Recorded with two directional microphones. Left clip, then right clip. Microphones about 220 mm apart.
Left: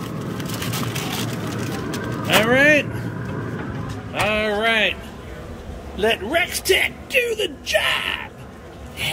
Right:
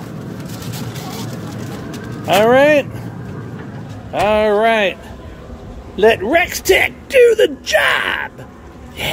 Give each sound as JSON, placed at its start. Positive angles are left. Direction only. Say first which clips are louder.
{"t": 2.2, "sound": "speech", "louder": "right 5 dB", "side_deg": -15}
{"t": 4.1, "sound": "music", "louder": "right 7 dB", "side_deg": -15}
{"t": 5.9, "sound": "speech", "louder": "right 8 dB", "side_deg": -15}